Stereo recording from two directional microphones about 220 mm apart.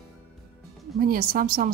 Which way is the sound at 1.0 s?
40° right (ahead or behind).